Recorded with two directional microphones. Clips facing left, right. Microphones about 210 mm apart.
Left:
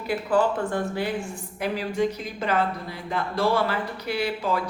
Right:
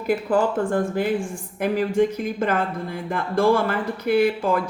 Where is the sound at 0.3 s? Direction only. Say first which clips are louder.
Even; 45° right (ahead or behind).